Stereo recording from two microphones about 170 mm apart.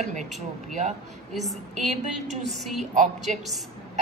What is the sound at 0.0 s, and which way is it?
Speech, 45° right (ahead or behind).